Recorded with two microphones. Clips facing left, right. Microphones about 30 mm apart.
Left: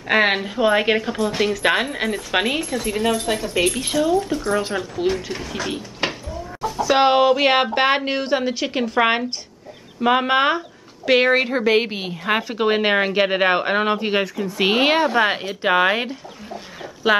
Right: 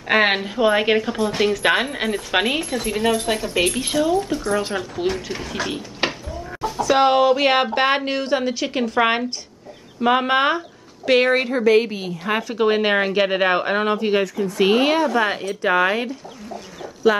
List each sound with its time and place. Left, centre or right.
0.1 s a woman's voice: centre
6.8 s a woman's voice: centre